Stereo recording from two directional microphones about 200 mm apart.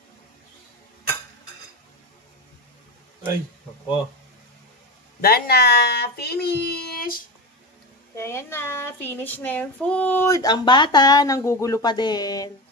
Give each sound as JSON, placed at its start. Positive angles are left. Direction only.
{"t": 5.2, "sound": "speech", "side_deg": 50}
{"t": 8.2, "sound": "speech", "side_deg": 15}